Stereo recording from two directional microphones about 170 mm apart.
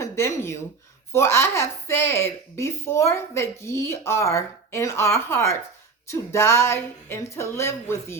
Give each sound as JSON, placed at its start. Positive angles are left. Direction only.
{"t": 0.0, "sound": "a woman's voice", "side_deg": 15}